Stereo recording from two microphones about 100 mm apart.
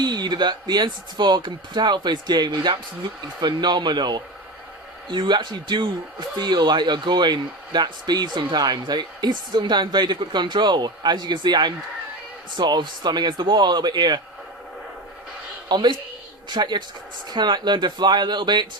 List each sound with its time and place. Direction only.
0.0 s speech: 45° right (ahead or behind)
15.7 s speech: 50° right (ahead or behind)